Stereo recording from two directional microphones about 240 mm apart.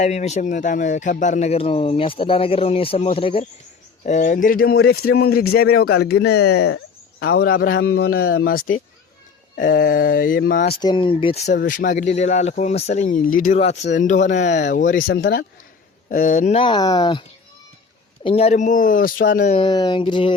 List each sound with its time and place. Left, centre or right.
0.0 s speech: left
10.8 s speech: centre; by 19.5 s left
19.5 s speech: centre